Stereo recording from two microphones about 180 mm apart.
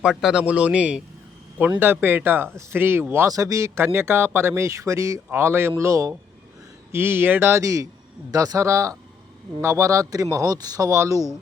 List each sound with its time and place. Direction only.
0.0 s a man's voice: 5° right (ahead or behind)